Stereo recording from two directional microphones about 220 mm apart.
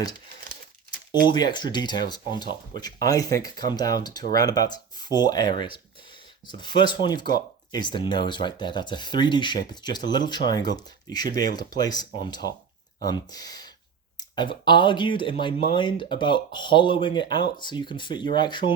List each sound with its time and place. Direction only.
1.3 s speech: 20° left (ahead or behind)
6.7 s speech: 20° left (ahead or behind)